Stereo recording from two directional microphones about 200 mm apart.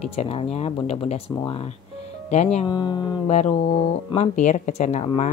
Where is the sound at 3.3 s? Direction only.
35° left (ahead or behind).